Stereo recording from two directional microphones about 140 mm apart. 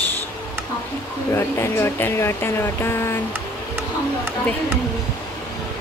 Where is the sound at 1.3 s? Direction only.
20° left (ahead or behind).